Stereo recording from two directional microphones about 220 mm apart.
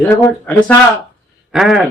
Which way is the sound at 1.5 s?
Centre (ahead or behind).